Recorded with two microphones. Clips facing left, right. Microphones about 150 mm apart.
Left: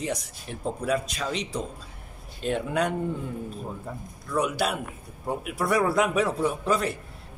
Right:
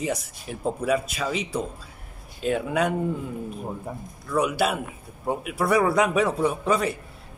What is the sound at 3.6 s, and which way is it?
Speech, 20° right (ahead or behind).